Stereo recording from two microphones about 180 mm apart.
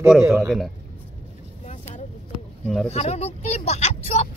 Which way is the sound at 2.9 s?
35° left (ahead or behind).